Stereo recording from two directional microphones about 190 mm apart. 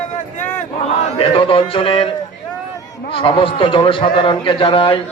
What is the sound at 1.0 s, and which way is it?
Speech, 30° left (ahead or behind).